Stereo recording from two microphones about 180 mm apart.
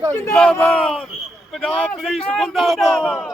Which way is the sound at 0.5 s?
5° left (ahead or behind).